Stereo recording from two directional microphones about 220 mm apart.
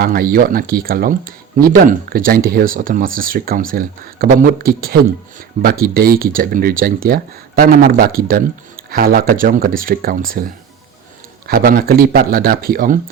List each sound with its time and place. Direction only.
0.0 s speech: 40° right (ahead or behind)